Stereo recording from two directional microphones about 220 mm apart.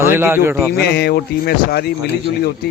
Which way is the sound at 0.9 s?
45° left (ahead or behind).